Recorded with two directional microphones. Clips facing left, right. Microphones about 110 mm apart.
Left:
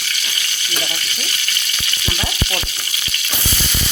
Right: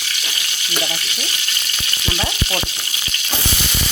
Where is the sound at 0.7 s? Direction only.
20° right (ahead or behind).